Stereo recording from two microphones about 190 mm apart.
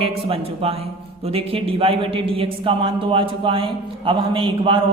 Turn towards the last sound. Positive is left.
turn(degrees=-25)  # may be behind; listen again after turning